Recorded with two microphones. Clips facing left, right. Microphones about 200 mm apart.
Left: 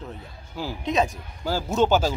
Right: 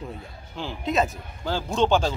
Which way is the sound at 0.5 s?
Centre (ahead or behind).